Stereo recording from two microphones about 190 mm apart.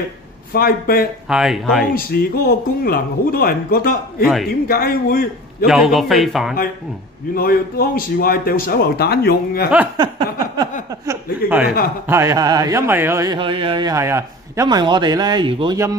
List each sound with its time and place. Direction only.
0.5 s speech: 50° left (ahead or behind)
1.3 s a man's voice: centre (ahead or behind)
2.0 s speech: 55° left (ahead or behind)
5.7 s a man's voice: centre (ahead or behind)
7.3 s speech: 50° left (ahead or behind)
11.4 s speech: 10° right (ahead or behind)